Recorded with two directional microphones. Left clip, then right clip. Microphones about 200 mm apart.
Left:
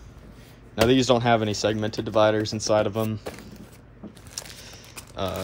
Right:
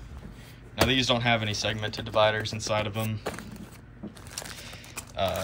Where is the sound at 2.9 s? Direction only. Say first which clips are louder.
Left 6 dB; 20° left (ahead or behind).